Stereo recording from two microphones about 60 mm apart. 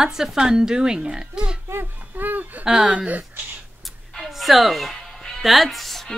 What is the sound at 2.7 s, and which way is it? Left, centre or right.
Speech, centre.